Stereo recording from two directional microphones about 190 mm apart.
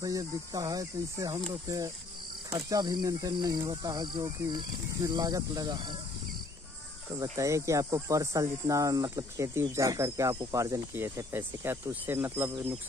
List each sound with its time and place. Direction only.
0.0 s speech: 20° right (ahead or behind)
7.3 s speech: 15° right (ahead or behind)